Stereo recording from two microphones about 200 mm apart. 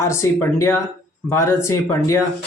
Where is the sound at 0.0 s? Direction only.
15° left (ahead or behind).